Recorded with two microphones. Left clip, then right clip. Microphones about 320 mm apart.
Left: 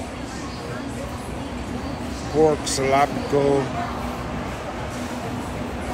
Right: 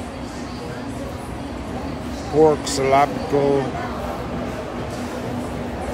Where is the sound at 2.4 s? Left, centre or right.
Centre.